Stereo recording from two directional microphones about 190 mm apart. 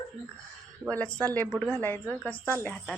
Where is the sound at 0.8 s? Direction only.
5° left (ahead or behind).